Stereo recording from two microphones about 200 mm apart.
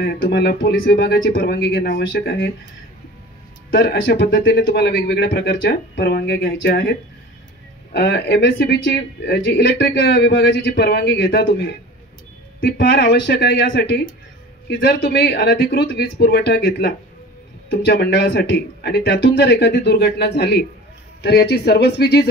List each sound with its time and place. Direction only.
0.0 s speech: 55° left (ahead or behind)
3.7 s speech: 50° left (ahead or behind)